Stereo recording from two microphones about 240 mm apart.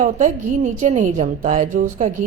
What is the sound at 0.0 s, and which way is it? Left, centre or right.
A woman's voice, right.